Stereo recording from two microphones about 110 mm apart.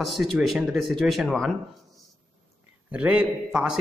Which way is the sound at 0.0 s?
Centre (ahead or behind).